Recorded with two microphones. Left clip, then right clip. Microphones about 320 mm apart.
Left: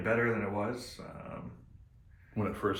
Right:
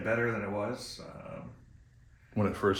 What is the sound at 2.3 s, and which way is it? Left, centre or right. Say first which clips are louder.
Speech: right 4 dB; right.